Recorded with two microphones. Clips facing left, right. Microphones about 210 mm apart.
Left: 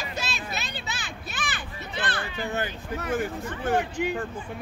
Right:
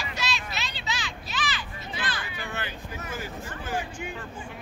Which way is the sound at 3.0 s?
60° left (ahead or behind).